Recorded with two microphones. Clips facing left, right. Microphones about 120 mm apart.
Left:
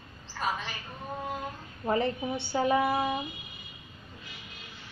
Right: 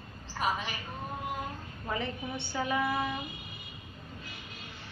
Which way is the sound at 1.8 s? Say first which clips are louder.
Left 7 dB; 35° left (ahead or behind).